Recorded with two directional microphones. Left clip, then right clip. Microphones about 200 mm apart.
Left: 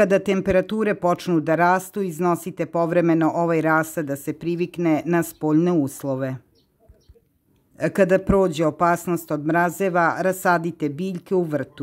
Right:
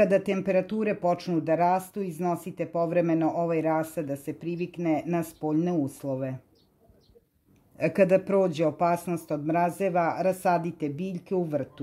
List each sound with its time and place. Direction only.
0.0 s speech: 20° left (ahead or behind)
7.7 s speech: 15° left (ahead or behind)